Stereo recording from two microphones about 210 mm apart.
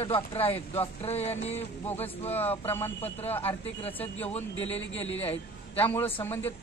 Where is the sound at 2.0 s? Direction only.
10° left (ahead or behind).